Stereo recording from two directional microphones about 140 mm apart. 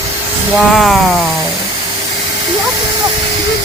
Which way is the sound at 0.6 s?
Centre (ahead or behind).